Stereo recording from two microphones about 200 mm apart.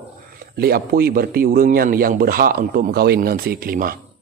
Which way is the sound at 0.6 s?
50° right (ahead or behind).